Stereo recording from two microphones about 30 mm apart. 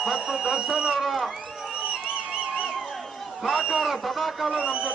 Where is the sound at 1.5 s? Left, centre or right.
Centre.